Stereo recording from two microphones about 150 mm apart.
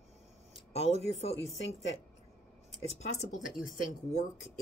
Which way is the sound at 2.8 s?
45° left (ahead or behind).